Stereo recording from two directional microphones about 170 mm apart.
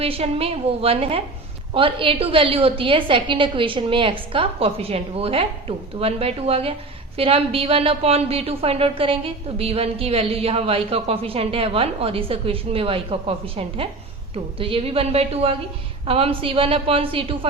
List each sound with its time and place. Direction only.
0.0 s a woman's voice: 35° right (ahead or behind)